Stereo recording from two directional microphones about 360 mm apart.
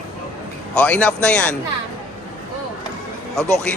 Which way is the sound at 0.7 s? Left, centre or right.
Centre.